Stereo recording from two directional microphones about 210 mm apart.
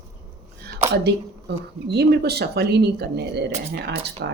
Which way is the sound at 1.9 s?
50° right (ahead or behind).